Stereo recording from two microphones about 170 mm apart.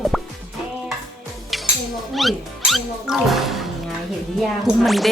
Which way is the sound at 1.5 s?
Centre (ahead or behind).